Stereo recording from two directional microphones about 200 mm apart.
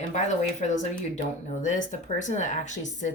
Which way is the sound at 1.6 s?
40° left (ahead or behind).